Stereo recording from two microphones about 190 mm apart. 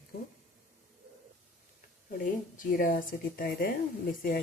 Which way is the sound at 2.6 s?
50° left (ahead or behind).